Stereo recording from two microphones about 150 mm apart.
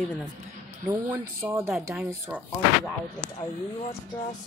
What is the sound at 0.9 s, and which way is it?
Speech, 20° right (ahead or behind).